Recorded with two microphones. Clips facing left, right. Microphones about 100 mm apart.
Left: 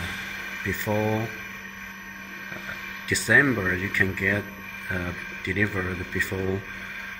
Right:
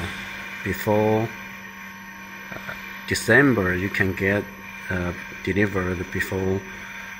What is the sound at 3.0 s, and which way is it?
Speech, 15° right (ahead or behind).